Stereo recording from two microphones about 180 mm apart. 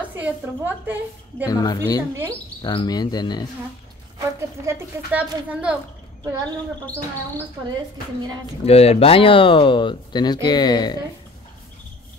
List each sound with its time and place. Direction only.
0.0 s a child's voice: 10° right (ahead or behind)
1.4 s speech: 20° left (ahead or behind)
4.2 s a child's voice: 15° right (ahead or behind)
8.6 s speech: 35° left (ahead or behind)